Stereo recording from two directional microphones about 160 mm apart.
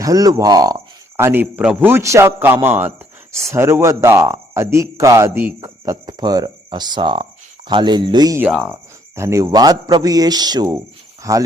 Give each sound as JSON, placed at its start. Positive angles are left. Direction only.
{"t": 0.0, "sound": "speech", "side_deg": -20}
{"t": 8.4, "sound": "speech", "side_deg": -10}